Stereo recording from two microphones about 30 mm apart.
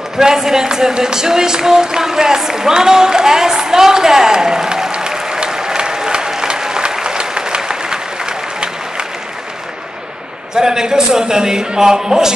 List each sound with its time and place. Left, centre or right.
0.2 s speech: centre
5.1 s applause: centre
10.5 s speech: right